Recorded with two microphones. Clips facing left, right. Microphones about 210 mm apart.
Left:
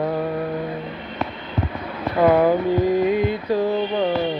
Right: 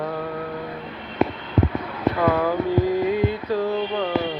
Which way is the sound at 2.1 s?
20° left (ahead or behind).